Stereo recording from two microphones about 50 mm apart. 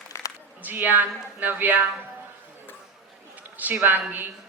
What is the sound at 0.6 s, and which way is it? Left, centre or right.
Speech, right.